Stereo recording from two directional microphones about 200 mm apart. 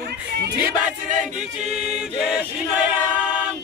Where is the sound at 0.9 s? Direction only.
5° right (ahead or behind).